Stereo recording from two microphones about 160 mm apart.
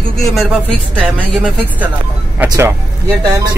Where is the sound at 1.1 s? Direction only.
10° right (ahead or behind).